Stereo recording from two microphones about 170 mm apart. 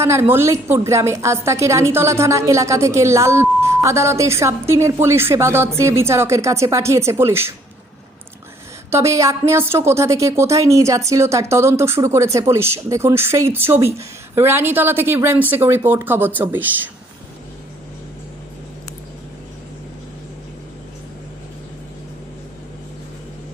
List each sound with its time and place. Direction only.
0.0 s a woman's voice: 15° right (ahead or behind)
8.9 s a woman's voice: 15° right (ahead or behind)